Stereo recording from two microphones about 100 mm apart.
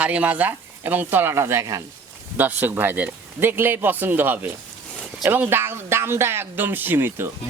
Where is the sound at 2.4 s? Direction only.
20° right (ahead or behind).